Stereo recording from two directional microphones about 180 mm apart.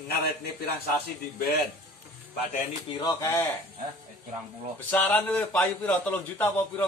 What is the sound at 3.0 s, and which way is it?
Speech, 15° left (ahead or behind).